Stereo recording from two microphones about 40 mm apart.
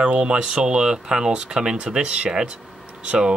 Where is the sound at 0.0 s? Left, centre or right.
Right.